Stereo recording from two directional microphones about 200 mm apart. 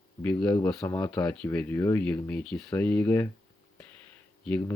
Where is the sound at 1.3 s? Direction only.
5° left (ahead or behind).